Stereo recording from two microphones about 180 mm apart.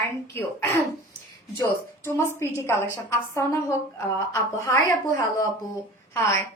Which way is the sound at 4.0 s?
15° left (ahead or behind).